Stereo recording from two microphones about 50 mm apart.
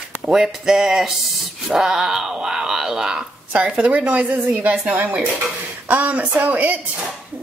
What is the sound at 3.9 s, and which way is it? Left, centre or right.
Speech, right.